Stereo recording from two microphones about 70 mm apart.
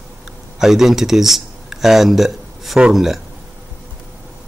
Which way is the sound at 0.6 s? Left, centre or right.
Centre.